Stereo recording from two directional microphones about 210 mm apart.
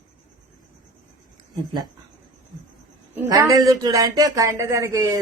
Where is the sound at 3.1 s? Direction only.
15° right (ahead or behind).